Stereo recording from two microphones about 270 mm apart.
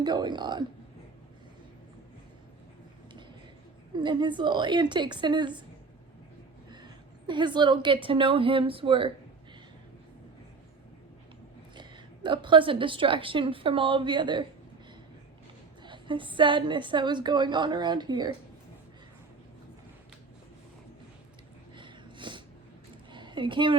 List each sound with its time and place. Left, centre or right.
0.0 s a woman's voice: centre
3.9 s a woman's voice: centre
6.7 s a sound: centre
8.0 s speech: centre
11.7 s a woman's voice: centre
15.8 s a woman's voice: centre
21.8 s a sound: centre